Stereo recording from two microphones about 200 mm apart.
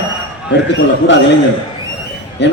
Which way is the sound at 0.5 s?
65° left (ahead or behind).